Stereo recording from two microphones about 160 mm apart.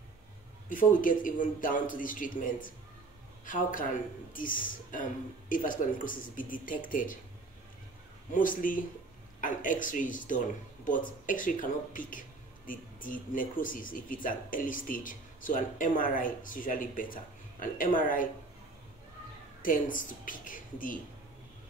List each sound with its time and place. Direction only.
0.7 s speech: 55° left (ahead or behind)
8.3 s speech: 60° left (ahead or behind)
19.6 s speech: 55° left (ahead or behind)